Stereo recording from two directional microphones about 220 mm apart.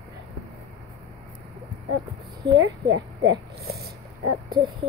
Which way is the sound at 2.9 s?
55° right (ahead or behind).